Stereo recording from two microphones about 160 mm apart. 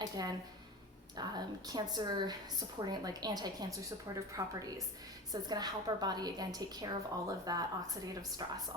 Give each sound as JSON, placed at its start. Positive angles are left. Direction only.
{"t": 0.0, "sound": "a woman's voice", "side_deg": -25}